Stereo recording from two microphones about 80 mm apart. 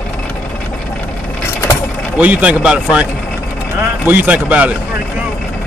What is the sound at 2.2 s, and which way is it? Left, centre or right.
Speech, centre.